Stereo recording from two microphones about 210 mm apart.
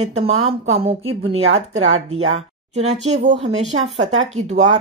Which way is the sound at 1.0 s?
75° right (ahead or behind).